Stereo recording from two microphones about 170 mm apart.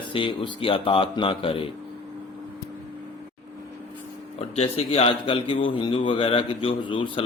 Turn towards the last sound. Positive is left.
turn(degrees=30)  # may be behind; listen again after turning